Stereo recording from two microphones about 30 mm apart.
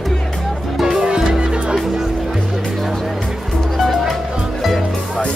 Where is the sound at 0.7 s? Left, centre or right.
Centre.